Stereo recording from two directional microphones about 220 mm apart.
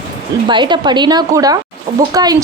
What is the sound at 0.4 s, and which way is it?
A woman's voice, 20° right (ahead or behind).